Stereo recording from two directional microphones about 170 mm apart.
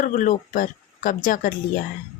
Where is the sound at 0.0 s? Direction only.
50° left (ahead or behind).